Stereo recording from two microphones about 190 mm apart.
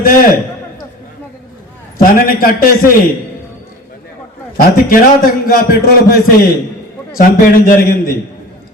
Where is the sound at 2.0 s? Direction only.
50° left (ahead or behind).